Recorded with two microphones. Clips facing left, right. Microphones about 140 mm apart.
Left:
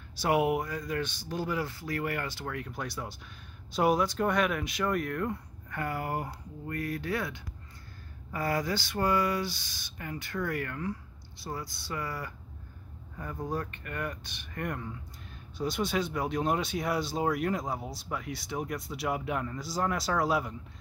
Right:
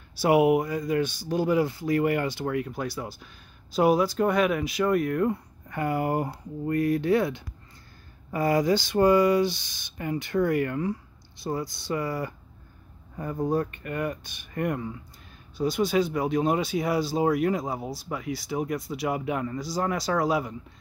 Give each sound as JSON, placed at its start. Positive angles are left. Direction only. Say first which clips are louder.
{"t": 0.2, "sound": "speech", "louder": "right 7 dB", "side_deg": -10}